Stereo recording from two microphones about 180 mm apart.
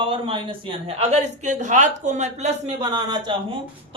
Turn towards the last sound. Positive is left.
turn(degrees=-25)  # may be behind; listen again after turning